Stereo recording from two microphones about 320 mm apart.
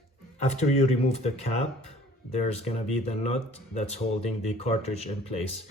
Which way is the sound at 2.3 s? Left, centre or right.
Left.